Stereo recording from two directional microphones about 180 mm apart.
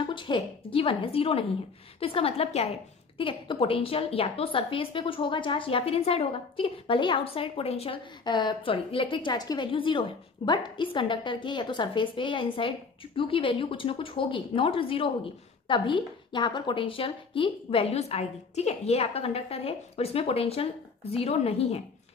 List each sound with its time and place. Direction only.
0.0 s a woman's voice: 25° left (ahead or behind)